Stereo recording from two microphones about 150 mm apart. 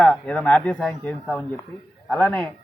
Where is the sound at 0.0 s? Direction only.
10° left (ahead or behind).